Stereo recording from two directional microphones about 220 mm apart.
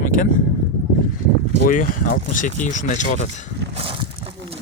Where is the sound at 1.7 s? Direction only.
40° left (ahead or behind).